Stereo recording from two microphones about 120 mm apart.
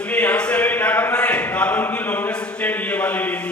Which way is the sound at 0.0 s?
10° left (ahead or behind).